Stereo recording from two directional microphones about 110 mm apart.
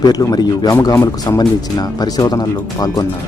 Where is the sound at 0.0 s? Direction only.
35° left (ahead or behind).